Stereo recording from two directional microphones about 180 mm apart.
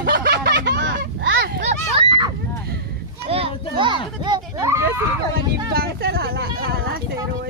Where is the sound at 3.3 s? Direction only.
30° right (ahead or behind); by 5.0 s 15° right (ahead or behind).